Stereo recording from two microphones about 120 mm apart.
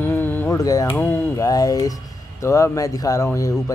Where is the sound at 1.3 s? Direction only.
30° left (ahead or behind).